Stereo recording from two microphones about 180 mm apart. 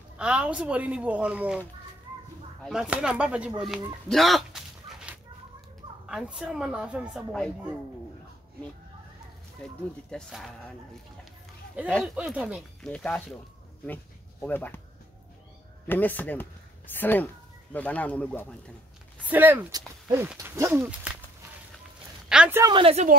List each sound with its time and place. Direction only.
0.2 s speech: 5° right (ahead or behind)
2.6 s speech: 5° right (ahead or behind)
10.1 s speech: centre (ahead or behind)
11.8 s speech: 10° right (ahead or behind)
12.8 s speech: 5° left (ahead or behind)
14.4 s speech: 10° left (ahead or behind)
15.9 s speech: 10° left (ahead or behind)
19.2 s speech: 10° right (ahead or behind)
19.7 s speech: 20° right (ahead or behind)
22.3 s speech: 5° right (ahead or behind)
22.6 s a woman's voice: 25° right (ahead or behind)